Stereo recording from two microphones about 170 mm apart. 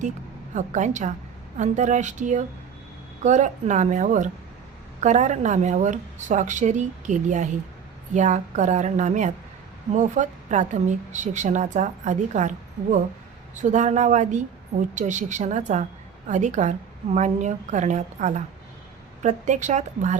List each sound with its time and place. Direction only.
0.5 s speech: 45° right (ahead or behind)
13.6 s speech: 45° right (ahead or behind)